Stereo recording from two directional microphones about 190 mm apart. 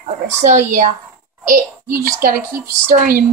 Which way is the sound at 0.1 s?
40° right (ahead or behind).